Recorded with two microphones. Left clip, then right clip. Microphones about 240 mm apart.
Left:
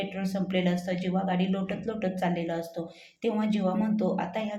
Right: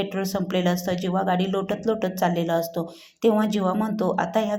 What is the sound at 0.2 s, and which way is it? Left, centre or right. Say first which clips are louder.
A woman's voice: right 4 dB; right.